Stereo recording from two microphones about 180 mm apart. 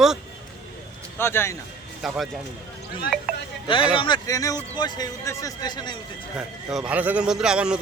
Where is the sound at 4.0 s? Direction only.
25° left (ahead or behind).